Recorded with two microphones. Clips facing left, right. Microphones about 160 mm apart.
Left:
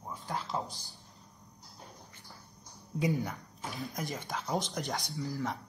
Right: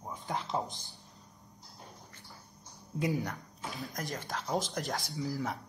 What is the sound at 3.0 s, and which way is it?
Speech, centre (ahead or behind).